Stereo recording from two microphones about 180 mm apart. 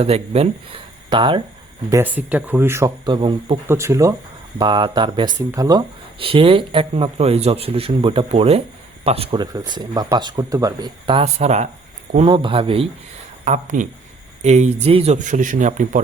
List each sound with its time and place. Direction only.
0.0 s speech: 35° right (ahead or behind)
1.9 s speech: 10° right (ahead or behind)
3.7 s speech: 15° right (ahead or behind); by 12.9 s 30° right (ahead or behind)
13.4 s speech: 45° right (ahead or behind)